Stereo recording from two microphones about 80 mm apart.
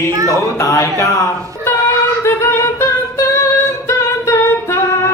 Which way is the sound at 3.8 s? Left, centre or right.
Left.